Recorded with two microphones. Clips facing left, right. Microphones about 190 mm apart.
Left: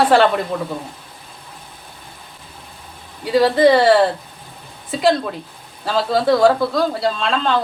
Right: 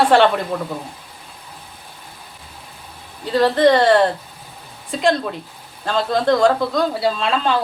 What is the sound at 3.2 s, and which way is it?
Speech, 10° left (ahead or behind).